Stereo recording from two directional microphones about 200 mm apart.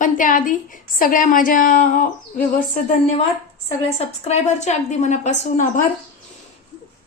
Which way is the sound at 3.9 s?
35° left (ahead or behind).